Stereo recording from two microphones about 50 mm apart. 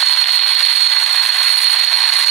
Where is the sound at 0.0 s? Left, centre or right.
Centre.